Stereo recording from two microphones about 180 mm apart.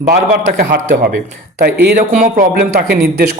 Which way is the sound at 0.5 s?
55° right (ahead or behind).